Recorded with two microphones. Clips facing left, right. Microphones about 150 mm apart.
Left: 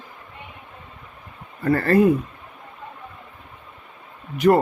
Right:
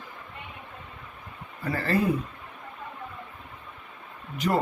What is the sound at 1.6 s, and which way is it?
Speech, 55° left (ahead or behind).